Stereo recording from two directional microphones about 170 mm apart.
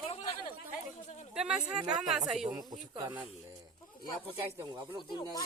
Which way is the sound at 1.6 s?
25° right (ahead or behind).